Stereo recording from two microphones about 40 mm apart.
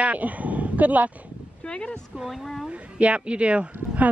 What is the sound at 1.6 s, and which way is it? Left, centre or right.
Speech, left.